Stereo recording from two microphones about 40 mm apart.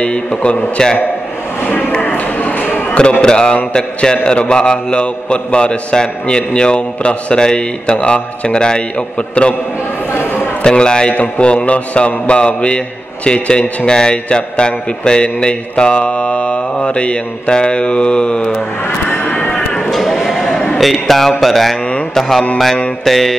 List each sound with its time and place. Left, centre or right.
0.0 s a man's voice: left
2.0 s a sound: left
3.1 s a man's voice: centre
10.6 s a man's voice: left
11.1 s a man's voice: left
19.0 s music: left
19.9 s sheep: centre
20.7 s a man's voice: centre
23.0 s a man's voice: centre